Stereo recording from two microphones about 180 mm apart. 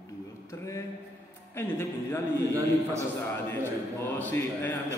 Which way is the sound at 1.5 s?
10° left (ahead or behind).